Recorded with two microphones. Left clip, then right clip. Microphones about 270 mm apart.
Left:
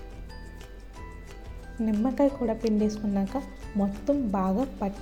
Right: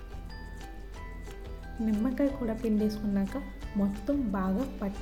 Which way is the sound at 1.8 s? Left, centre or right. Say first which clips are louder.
Left 5 dB; centre.